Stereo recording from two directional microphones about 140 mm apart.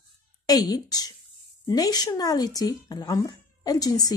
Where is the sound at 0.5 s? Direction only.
25° left (ahead or behind).